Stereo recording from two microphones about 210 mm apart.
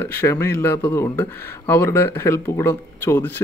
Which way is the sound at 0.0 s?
10° left (ahead or behind).